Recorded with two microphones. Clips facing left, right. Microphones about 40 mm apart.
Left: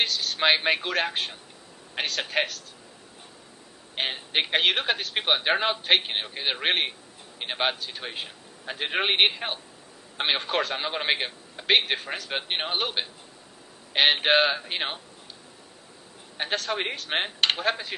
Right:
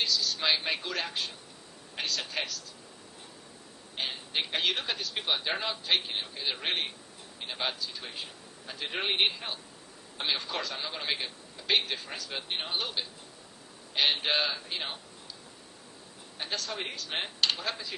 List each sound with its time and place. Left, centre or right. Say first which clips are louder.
0.0 s a man's voice: left 5 dB; left
3.9 s a man's voice: left 6 dB; left
16.4 s a man's voice: left 7 dB; left